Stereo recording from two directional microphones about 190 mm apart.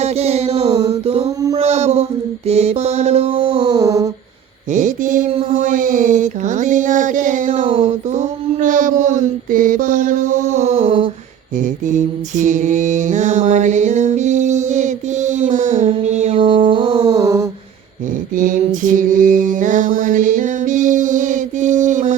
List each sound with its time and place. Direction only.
0.0 s mantra: 35° right (ahead or behind)
0.7 s a sound: 30° right (ahead or behind)
2.5 s mantra: 35° right (ahead or behind); by 4.1 s 20° right (ahead or behind)
4.7 s mantra: 40° right (ahead or behind)
11.6 s mantra: 40° right (ahead or behind); by 17.4 s 15° right (ahead or behind)
18.3 s mantra: 45° right (ahead or behind)